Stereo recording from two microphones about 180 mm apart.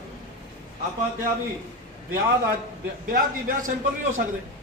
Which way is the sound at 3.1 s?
50° right (ahead or behind).